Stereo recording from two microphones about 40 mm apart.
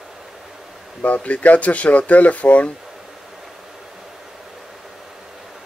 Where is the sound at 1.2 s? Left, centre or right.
Left.